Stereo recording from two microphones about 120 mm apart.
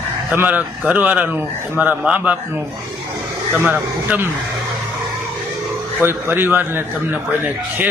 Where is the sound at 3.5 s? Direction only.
15° right (ahead or behind).